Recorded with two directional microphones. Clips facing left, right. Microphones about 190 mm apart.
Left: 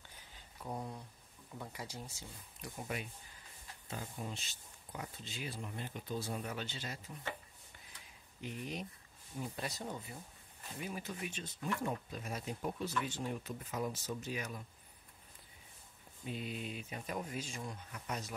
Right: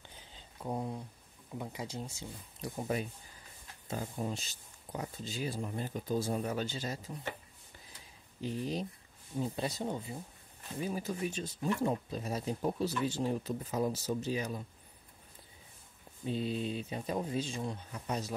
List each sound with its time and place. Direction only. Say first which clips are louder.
0.1 s a sound: right 4 dB; 25° right (ahead or behind)
1.6 s speech: right 6 dB; 20° right (ahead or behind); by 7.0 s 40° right (ahead or behind)
8.4 s speech: right 7 dB; 30° right (ahead or behind)
16.3 s speech: right 8 dB; 30° right (ahead or behind)